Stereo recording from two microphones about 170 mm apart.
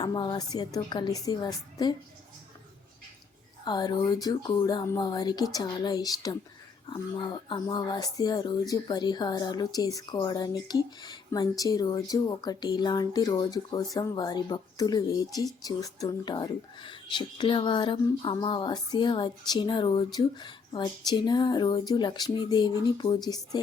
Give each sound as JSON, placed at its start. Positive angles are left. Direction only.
{"t": 0.0, "sound": "speech", "side_deg": 25}
{"t": 3.6, "sound": "speech", "side_deg": 25}